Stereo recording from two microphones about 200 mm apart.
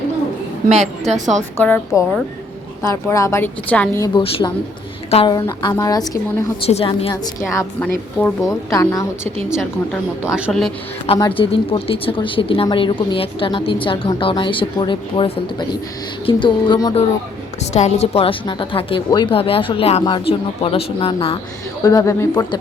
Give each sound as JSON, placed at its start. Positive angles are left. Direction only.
{"t": 0.7, "sound": "a woman's voice", "side_deg": -35}
{"t": 1.5, "sound": "a woman's voice", "side_deg": 10}
{"t": 2.8, "sound": "a woman's voice", "side_deg": 15}
{"t": 4.0, "sound": "a woman's voice", "side_deg": 25}
{"t": 6.7, "sound": "a woman's voice", "side_deg": 30}
{"t": 7.5, "sound": "a woman's voice", "side_deg": 10}
{"t": 10.3, "sound": "speech", "side_deg": 0}
{"t": 11.3, "sound": "a woman's voice", "side_deg": 25}
{"t": 17.7, "sound": "a woman's voice", "side_deg": 35}
{"t": 21.8, "sound": "a woman's voice", "side_deg": 15}